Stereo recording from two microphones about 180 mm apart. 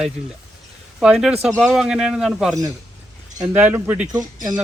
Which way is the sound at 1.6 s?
Centre (ahead or behind).